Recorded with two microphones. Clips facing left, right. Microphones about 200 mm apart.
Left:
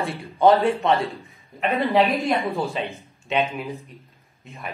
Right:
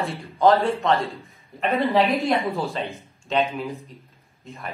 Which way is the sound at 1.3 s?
Centre (ahead or behind).